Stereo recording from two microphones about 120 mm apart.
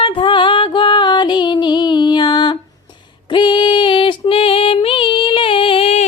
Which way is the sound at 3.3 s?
40° left (ahead or behind).